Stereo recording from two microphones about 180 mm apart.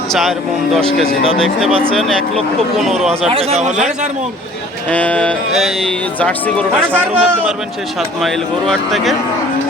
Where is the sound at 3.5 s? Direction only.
40° right (ahead or behind).